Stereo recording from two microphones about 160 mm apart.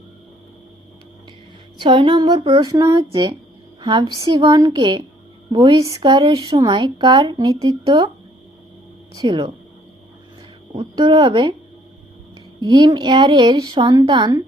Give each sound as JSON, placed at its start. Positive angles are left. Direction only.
{"t": 1.8, "sound": "speech", "side_deg": -30}
{"t": 9.1, "sound": "speech", "side_deg": -30}
{"t": 10.8, "sound": "speech", "side_deg": -30}
{"t": 12.5, "sound": "speech", "side_deg": -25}